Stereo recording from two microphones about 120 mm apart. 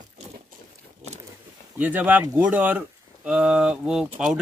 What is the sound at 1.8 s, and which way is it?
Speech, 15° right (ahead or behind).